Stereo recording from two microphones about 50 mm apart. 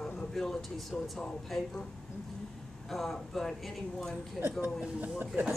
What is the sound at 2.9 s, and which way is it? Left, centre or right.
Speech, centre.